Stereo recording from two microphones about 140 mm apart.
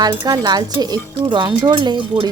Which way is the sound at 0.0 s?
30° right (ahead or behind).